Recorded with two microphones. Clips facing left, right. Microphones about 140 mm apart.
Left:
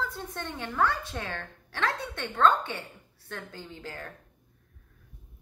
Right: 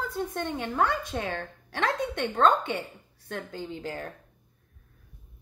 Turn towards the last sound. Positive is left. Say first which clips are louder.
# right 6 dB
turn(degrees=-15)  # may be behind; listen again after turning